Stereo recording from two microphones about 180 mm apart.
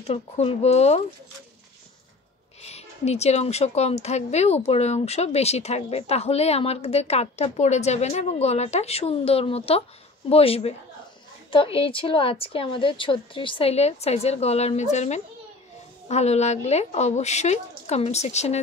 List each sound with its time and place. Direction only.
0.0 s a woman's voice: 35° left (ahead or behind)
2.6 s a woman's voice: 35° left (ahead or behind)